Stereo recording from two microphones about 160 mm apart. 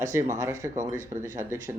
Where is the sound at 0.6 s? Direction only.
50° right (ahead or behind).